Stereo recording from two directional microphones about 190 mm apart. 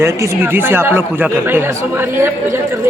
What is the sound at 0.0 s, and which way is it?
Speech, 15° right (ahead or behind).